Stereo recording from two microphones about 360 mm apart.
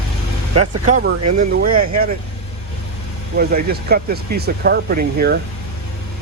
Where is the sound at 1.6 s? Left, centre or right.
Right.